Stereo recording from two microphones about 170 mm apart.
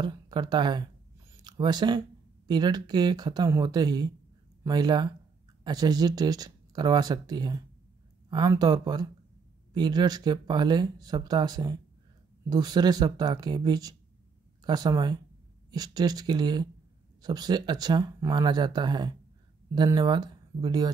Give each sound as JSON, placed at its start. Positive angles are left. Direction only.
{"t": 0.0, "sound": "speech", "side_deg": -25}